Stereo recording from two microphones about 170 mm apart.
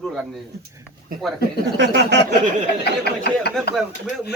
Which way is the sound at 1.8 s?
90° right.